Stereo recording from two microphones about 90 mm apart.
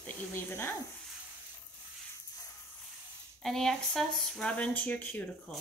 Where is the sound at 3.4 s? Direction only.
5° left (ahead or behind).